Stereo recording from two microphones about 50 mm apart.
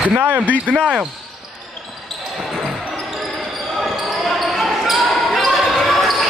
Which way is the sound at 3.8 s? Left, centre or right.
Centre.